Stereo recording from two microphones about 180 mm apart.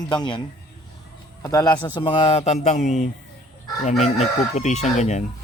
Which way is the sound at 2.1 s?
30° left (ahead or behind).